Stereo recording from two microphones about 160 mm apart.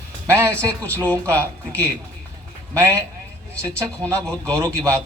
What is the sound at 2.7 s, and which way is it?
Speech, 20° right (ahead or behind).